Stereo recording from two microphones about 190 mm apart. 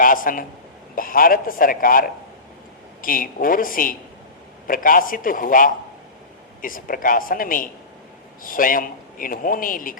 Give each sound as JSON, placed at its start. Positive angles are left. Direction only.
{"t": 0.0, "sound": "a man's voice", "side_deg": 45}